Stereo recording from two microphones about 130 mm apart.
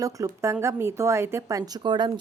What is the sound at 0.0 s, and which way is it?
A woman's voice, 25° right (ahead or behind).